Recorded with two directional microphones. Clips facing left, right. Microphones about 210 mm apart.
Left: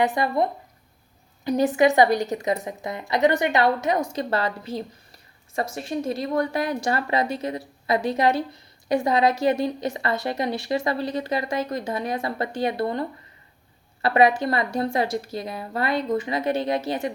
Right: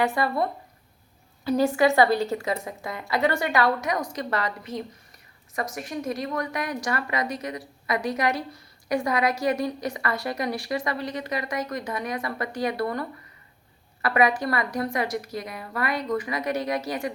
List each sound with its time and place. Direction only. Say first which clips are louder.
0.0 s a woman's voice: left 2 dB; 20° left (ahead or behind)